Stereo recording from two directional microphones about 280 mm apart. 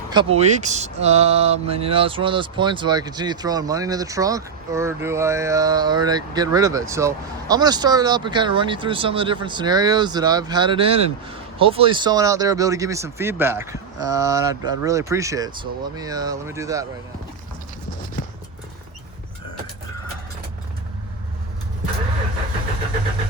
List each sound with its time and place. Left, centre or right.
0.1 s speech: centre